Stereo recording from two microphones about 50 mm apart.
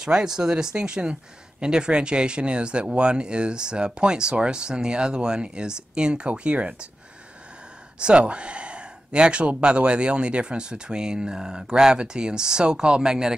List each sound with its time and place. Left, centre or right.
0.0 s speech: centre
8.0 s speech: right